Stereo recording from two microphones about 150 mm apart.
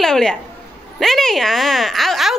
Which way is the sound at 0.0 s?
5° left (ahead or behind).